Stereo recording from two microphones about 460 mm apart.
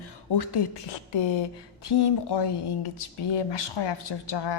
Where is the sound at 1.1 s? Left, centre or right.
Left.